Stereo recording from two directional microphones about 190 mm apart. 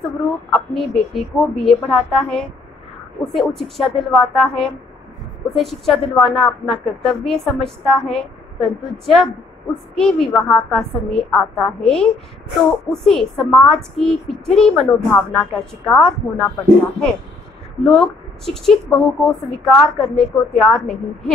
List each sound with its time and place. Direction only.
0.0 s a woman's voice: centre (ahead or behind)
17.8 s a woman's voice: centre (ahead or behind)